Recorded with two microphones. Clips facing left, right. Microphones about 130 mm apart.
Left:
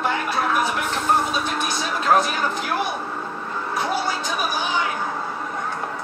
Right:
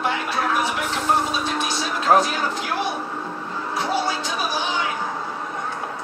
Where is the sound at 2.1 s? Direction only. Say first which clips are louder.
Right 2 dB; 25° right (ahead or behind).